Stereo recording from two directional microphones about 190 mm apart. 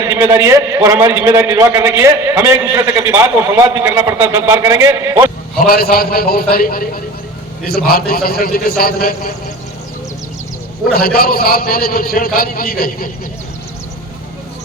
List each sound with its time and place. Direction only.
0.1 s a man's voice: 15° right (ahead or behind)
5.5 s a man's voice: 50° left (ahead or behind)
10.9 s a man's voice: 50° left (ahead or behind)